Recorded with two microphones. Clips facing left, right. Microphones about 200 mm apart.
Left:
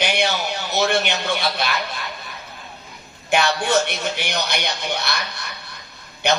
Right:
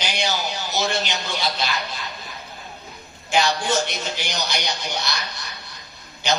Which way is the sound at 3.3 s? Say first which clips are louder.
Left 2 dB; 60° left (ahead or behind).